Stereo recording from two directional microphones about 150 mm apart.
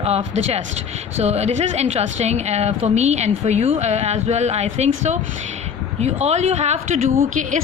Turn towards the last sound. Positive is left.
turn(degrees=-50)  # may be behind; listen again after turning